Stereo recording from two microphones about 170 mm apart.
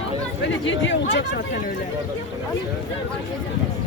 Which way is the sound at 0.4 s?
90° left.